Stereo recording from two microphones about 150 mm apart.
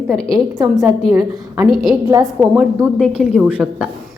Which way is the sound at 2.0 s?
25° right (ahead or behind).